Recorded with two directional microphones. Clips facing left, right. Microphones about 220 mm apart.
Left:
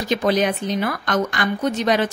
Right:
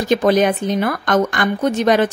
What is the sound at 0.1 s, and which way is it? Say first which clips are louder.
Speech: right 5 dB; 50° right (ahead or behind).